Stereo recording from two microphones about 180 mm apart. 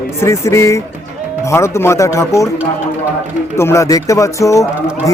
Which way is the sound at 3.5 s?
15° left (ahead or behind).